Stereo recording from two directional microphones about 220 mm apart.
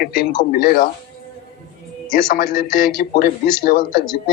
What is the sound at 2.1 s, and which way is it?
A man's voice, 40° left (ahead or behind).